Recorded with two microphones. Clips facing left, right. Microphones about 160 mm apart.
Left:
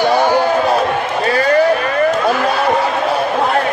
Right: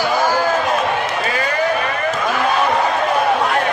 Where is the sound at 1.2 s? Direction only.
35° left (ahead or behind).